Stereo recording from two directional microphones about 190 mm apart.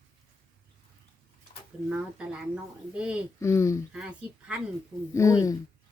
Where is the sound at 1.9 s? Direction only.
5° right (ahead or behind).